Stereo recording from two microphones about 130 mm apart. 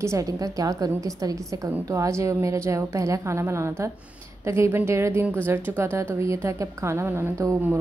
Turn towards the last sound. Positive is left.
turn(degrees=-20)  # may be behind; listen again after turning